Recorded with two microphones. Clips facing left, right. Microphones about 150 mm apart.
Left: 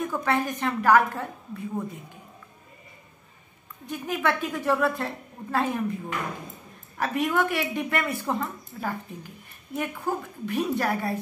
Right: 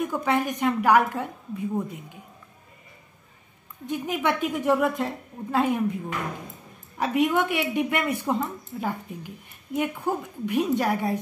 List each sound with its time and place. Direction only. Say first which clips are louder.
0.0 s speech: right 1 dB; 15° right (ahead or behind)
3.8 s speech: right 1 dB; 20° right (ahead or behind)
7.0 s speech: right 2 dB; 15° right (ahead or behind)